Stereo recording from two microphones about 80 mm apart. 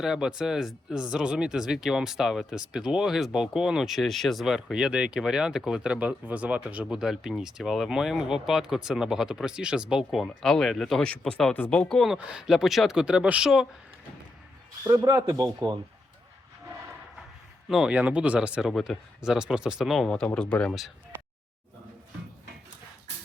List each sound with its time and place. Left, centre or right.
0.0 s speech: centre
6.9 s speech: centre
11.0 s speech: centre
12.1 s speech: centre
14.8 s speech: right
17.7 s speech: centre
17.9 s speech: centre
18.7 s speech: centre
19.2 s speech: centre
19.9 s speech: centre